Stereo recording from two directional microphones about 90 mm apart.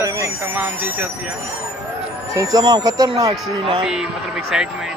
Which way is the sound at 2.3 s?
45° right (ahead or behind).